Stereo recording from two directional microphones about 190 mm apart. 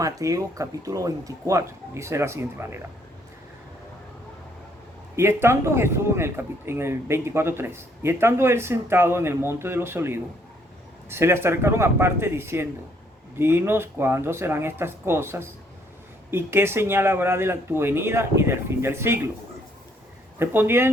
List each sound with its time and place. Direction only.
0.0 s speech: 15° right (ahead or behind)
5.1 s speech: 15° right (ahead or behind)
20.4 s speech: 10° right (ahead or behind)